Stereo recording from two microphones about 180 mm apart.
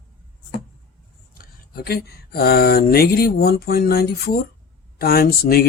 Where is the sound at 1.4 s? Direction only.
60° left (ahead or behind).